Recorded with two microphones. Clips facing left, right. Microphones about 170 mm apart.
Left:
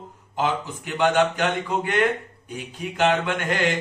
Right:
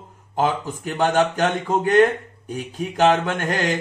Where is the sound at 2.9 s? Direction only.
40° right (ahead or behind).